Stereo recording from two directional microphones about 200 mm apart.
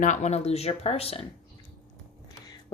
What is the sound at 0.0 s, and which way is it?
Speech, 35° left (ahead or behind).